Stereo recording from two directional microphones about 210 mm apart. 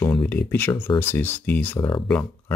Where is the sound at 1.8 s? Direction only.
20° left (ahead or behind).